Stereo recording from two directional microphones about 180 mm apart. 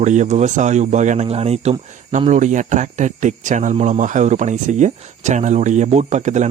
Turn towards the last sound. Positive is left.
turn(degrees=-40)  # may be behind; listen again after turning